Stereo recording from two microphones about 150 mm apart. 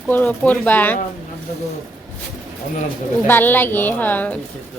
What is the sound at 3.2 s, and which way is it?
A woman's voice, 15° left (ahead or behind).